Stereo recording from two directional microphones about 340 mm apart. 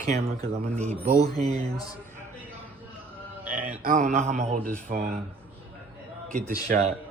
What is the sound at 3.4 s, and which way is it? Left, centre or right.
Music, right.